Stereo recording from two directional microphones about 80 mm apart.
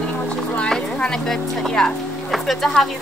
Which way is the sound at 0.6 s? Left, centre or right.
Centre.